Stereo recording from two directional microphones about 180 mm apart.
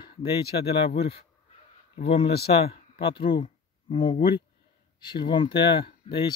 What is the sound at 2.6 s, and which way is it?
Speech, 30° left (ahead or behind).